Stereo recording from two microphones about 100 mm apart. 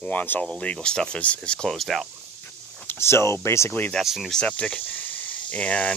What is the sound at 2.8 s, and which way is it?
Speech, 25° left (ahead or behind).